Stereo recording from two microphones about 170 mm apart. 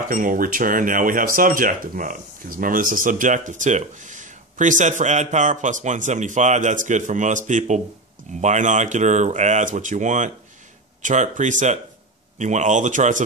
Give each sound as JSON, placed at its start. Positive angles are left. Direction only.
{"t": 0.1, "sound": "speech", "side_deg": -50}